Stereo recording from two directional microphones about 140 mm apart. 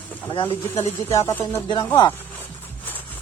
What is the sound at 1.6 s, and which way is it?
Speech, 35° left (ahead or behind).